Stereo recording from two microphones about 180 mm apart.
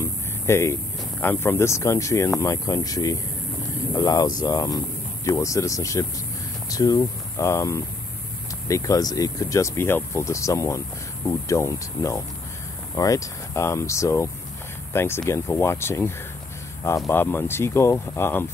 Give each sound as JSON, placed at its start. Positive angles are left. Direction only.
{"t": 0.0, "sound": "a sound", "side_deg": 15}
{"t": 1.2, "sound": "speech", "side_deg": 10}
{"t": 17.1, "sound": "speech", "side_deg": 10}